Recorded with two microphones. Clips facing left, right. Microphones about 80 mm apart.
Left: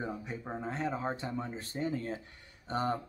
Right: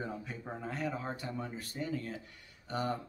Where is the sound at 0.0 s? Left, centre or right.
Left.